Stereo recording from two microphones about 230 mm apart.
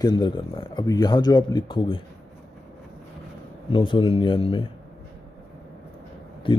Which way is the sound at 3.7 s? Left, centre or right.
Left.